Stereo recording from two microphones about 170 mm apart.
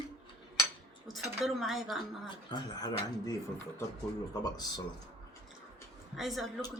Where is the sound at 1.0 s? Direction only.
Centre (ahead or behind).